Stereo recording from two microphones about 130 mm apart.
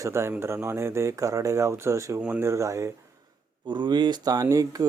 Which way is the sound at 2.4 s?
25° right (ahead or behind).